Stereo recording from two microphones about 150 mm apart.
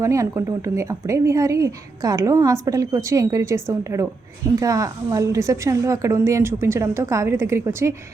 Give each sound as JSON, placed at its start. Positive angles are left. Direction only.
{"t": 0.0, "sound": "a woman's voice", "side_deg": -20}